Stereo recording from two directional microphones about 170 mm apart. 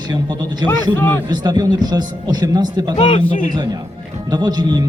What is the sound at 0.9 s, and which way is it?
Speech, 10° left (ahead or behind).